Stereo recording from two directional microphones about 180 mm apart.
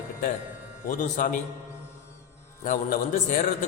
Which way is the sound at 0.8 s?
45° left (ahead or behind).